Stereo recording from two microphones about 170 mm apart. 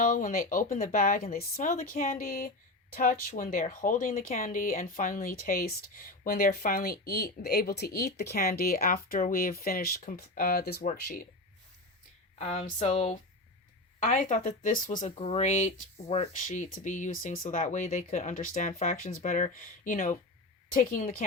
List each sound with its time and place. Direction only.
0.0 s speech: 55° left (ahead or behind)
12.4 s speech: 40° left (ahead or behind)
14.0 s speech: 50° left (ahead or behind)
15.1 s speech: 35° left (ahead or behind); by 21.0 s 55° left (ahead or behind)
21.2 s a woman's voice: 45° left (ahead or behind)